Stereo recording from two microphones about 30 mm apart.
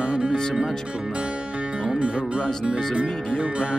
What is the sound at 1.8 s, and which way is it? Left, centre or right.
Music, right.